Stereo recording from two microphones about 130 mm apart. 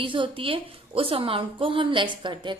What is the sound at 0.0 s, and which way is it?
A woman's voice, 40° right (ahead or behind).